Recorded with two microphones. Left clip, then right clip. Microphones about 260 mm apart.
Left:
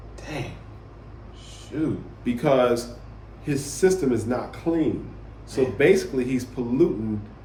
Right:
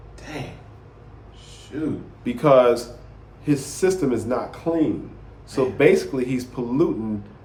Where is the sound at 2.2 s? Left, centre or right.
Centre.